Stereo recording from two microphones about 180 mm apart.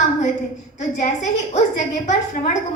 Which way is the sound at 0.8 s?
40° left (ahead or behind).